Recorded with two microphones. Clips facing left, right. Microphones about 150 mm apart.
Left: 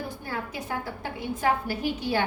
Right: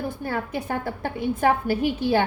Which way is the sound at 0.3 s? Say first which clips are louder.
Right 5 dB; 55° right (ahead or behind).